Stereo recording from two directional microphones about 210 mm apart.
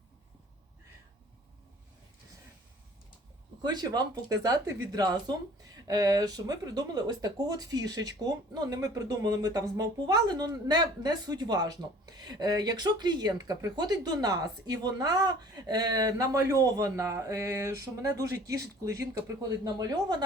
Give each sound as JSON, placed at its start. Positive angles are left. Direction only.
{"t": 3.6, "sound": "speech", "side_deg": -20}